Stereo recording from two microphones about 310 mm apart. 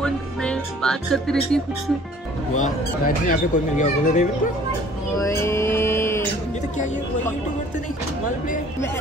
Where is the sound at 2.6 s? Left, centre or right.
Left.